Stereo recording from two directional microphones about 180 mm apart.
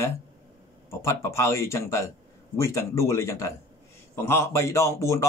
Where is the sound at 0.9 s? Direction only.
15° left (ahead or behind).